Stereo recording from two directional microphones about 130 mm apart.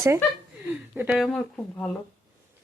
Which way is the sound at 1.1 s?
Centre (ahead or behind).